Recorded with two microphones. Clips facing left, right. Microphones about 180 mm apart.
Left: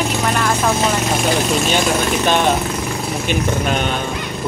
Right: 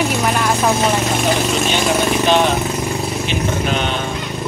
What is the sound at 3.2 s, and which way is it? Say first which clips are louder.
Speech: left 4 dB; 50° left (ahead or behind).